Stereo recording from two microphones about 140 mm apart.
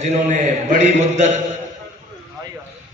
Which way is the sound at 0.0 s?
60° right (ahead or behind).